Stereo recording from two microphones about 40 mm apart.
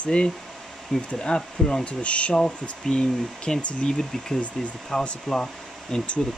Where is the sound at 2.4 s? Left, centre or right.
Left.